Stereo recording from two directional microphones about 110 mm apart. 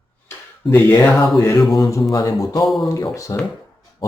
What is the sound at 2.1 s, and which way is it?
Speech, 30° left (ahead or behind).